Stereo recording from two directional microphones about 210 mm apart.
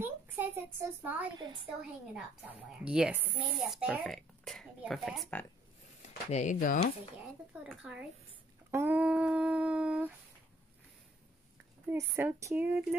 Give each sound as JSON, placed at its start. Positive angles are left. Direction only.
{"t": 0.0, "sound": "a child's voice", "side_deg": -10}
{"t": 2.8, "sound": "speech", "side_deg": -5}
{"t": 6.0, "sound": "speech", "side_deg": 35}
{"t": 7.6, "sound": "speech", "side_deg": -5}
{"t": 8.7, "sound": "a sound", "side_deg": -10}
{"t": 11.9, "sound": "speech", "side_deg": -10}